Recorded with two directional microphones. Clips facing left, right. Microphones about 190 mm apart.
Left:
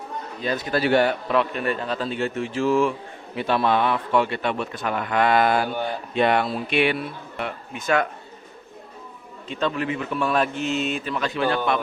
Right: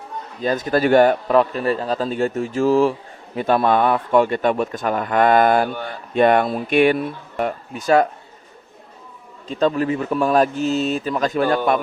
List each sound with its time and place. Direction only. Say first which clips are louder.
0.4 s a man's voice: right 5 dB; 45° right (ahead or behind)
9.5 s a man's voice: right 6 dB; 40° right (ahead or behind)